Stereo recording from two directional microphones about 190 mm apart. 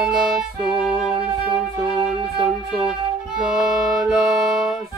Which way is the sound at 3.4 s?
Centre (ahead or behind).